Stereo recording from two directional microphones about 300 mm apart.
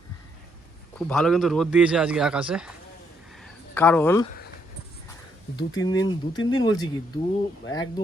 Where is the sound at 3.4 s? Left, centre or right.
Centre.